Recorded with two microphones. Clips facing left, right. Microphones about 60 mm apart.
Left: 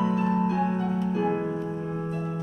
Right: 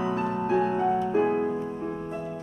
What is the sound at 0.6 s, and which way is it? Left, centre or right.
Piano, right.